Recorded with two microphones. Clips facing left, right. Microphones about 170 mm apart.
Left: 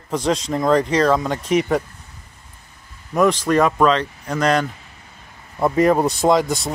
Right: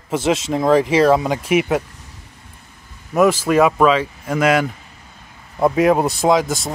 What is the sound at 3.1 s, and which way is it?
A man's voice, 5° right (ahead or behind).